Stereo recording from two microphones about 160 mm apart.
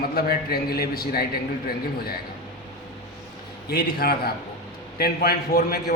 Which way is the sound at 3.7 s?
75° left (ahead or behind).